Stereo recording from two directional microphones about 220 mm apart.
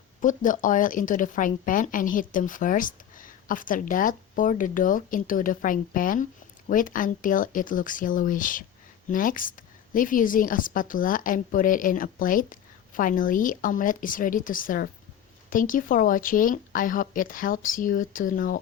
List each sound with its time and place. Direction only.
0.2 s a woman's voice: 35° left (ahead or behind)